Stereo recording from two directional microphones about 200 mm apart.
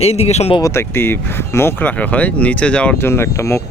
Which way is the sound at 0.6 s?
15° left (ahead or behind).